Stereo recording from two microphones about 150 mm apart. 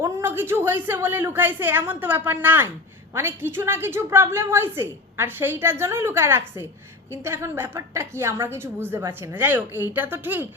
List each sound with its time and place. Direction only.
0.0 s a woman's voice: 15° right (ahead or behind)